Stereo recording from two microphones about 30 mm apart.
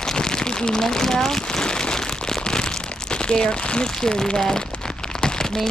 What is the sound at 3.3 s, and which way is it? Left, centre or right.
Speech, left.